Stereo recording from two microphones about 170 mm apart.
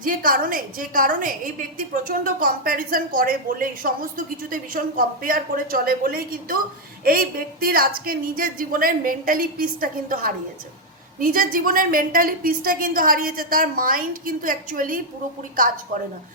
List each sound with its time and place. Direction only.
0.0 s a woman's voice: 55° right (ahead or behind)